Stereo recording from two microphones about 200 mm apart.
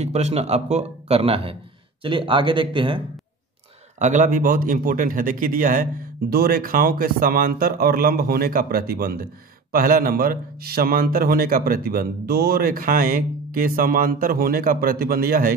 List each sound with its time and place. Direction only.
0.0 s speech: 35° right (ahead or behind)
4.0 s speech: 40° right (ahead or behind)